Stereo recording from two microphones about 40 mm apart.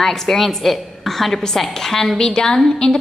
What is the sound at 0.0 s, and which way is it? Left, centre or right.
A woman's voice, centre.